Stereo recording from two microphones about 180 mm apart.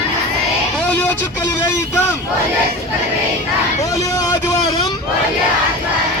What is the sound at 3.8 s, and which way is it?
Vehicle, 20° left (ahead or behind).